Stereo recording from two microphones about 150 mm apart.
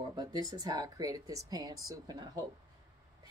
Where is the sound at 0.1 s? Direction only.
25° right (ahead or behind).